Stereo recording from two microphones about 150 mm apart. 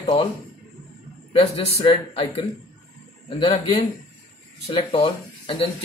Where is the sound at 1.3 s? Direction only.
40° left (ahead or behind).